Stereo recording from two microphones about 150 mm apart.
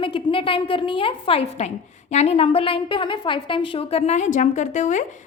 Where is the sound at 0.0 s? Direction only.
35° left (ahead or behind).